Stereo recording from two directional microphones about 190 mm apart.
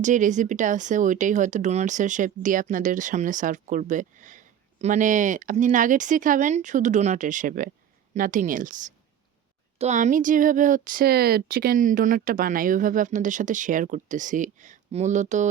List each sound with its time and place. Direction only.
0.0 s speech: 40° right (ahead or behind)